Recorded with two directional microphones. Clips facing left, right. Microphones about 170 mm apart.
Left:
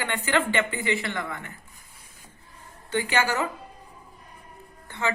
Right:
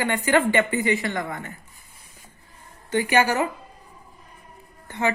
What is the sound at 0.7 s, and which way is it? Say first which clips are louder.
Speech: right 5 dB; 20° right (ahead or behind).